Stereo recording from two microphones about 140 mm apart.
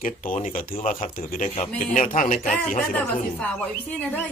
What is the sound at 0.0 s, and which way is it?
A man's voice, 75° left (ahead or behind).